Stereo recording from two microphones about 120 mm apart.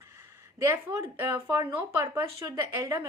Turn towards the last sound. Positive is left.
turn(degrees=-25)  # may be behind; listen again after turning